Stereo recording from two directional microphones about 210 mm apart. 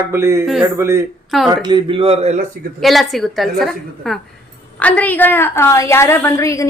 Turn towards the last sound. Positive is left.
turn(degrees=15)  # may be behind; listen again after turning